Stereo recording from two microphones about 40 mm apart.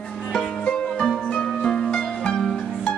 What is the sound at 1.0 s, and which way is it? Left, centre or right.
Music, centre.